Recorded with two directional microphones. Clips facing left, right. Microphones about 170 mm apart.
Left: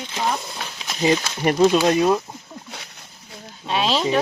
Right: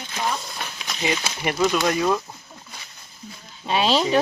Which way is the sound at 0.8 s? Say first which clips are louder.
Left 7 dB; 30° left (ahead or behind).